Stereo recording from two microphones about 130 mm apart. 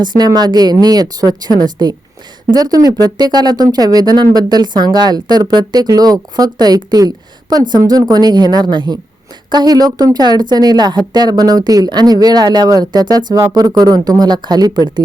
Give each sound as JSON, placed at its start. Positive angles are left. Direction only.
{"t": 0.2, "sound": "speech", "side_deg": -30}